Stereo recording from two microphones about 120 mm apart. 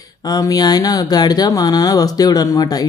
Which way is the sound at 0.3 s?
30° left (ahead or behind).